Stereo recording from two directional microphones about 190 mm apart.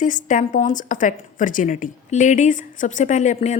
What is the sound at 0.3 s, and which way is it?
A woman's voice, 45° left (ahead or behind).